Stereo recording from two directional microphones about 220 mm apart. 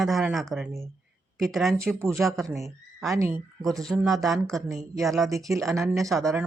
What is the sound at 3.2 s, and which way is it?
Speech, 10° right (ahead or behind).